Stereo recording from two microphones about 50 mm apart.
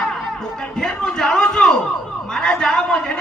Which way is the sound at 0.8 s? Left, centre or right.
Centre.